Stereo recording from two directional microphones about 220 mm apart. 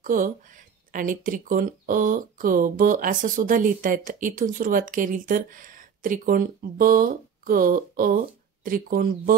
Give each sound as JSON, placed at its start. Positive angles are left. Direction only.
{"t": 0.0, "sound": "speech", "side_deg": -40}